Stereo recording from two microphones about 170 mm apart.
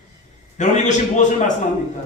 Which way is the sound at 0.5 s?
45° left (ahead or behind).